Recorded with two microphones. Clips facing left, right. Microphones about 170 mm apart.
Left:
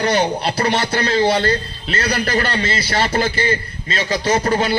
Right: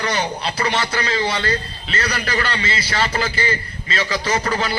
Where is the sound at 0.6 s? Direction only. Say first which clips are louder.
Left 2 dB; 55° left (ahead or behind).